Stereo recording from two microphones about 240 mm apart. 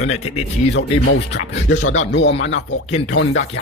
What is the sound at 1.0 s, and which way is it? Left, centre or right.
Speech, left.